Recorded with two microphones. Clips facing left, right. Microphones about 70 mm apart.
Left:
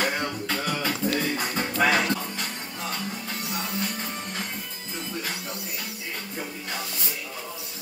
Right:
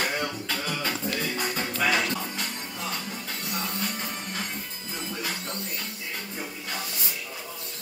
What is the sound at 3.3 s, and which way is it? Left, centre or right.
Music, centre.